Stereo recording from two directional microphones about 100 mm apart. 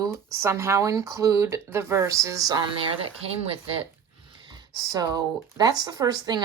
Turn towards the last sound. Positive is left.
turn(degrees=-45)  # may be behind; listen again after turning